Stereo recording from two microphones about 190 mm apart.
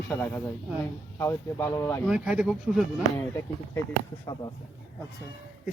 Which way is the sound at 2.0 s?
5° right (ahead or behind).